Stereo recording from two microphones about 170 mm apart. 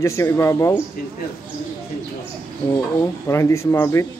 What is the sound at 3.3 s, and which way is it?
Speech, 15° left (ahead or behind).